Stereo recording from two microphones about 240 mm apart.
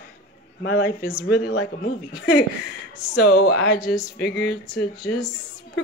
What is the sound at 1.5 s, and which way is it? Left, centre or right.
Speech, left.